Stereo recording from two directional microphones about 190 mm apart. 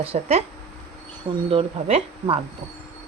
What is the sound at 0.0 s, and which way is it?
Speech, 30° right (ahead or behind).